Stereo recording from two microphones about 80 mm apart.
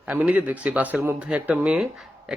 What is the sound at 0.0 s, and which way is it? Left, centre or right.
Speech, centre.